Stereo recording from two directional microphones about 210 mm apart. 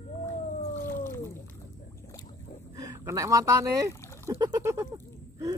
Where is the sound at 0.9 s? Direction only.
10° left (ahead or behind).